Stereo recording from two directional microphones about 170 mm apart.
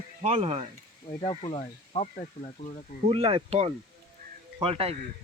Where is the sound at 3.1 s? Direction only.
35° right (ahead or behind).